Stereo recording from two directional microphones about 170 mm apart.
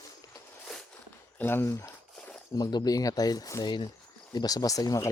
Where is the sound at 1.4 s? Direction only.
15° left (ahead or behind).